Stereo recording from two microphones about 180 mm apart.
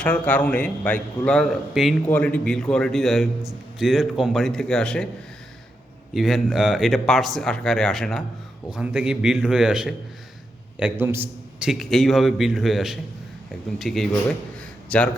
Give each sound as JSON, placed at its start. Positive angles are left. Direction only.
{"t": 0.0, "sound": "a man's voice", "side_deg": 10}
{"t": 6.1, "sound": "a man's voice", "side_deg": 0}